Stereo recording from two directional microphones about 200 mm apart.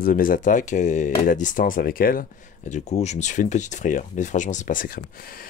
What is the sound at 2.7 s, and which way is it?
Speech, 35° left (ahead or behind).